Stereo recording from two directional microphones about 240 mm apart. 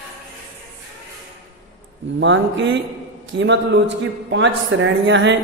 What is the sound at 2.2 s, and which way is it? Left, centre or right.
A woman's voice, right.